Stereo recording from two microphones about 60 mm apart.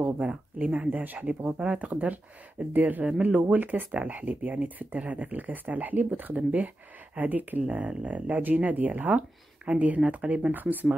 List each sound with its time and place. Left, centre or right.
0.0 s speech: right